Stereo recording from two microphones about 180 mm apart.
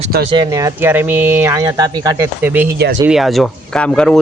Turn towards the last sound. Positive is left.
turn(degrees=5)  # may be behind; listen again after turning